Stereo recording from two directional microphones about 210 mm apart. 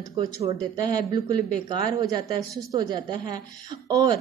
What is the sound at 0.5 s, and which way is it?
Speech, 20° right (ahead or behind).